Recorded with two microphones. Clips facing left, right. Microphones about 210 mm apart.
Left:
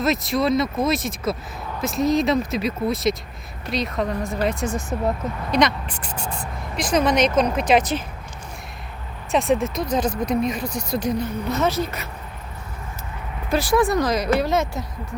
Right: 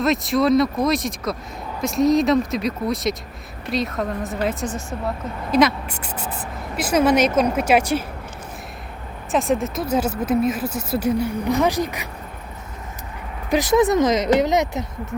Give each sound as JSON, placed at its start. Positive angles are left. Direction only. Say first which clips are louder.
{"t": 0.0, "sound": "speech", "louder": "right 2 dB", "side_deg": 0}
{"t": 4.6, "sound": "speech", "louder": "left 2 dB", "side_deg": 10}
{"t": 5.5, "sound": "speech", "louder": "right 3 dB", "side_deg": -5}
{"t": 9.3, "sound": "speech", "louder": "even", "side_deg": 0}
{"t": 13.5, "sound": "speech", "louder": "right 3 dB", "side_deg": -20}